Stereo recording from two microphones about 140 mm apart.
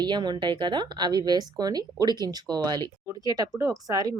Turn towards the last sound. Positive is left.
turn(degrees=-25)  # may be behind; listen again after turning